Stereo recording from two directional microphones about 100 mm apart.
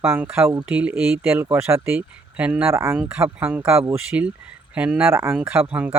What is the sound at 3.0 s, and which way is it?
Speech, 10° right (ahead or behind).